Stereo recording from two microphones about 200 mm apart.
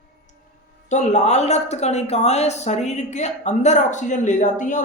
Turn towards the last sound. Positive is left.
turn(degrees=40)  # may be behind; listen again after turning